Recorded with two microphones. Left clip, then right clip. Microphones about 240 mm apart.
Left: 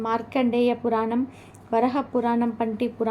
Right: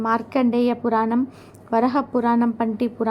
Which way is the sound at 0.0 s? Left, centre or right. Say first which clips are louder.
Right 3 dB; centre.